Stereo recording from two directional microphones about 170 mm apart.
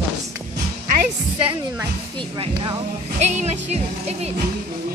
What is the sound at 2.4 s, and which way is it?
Music, 30° right (ahead or behind).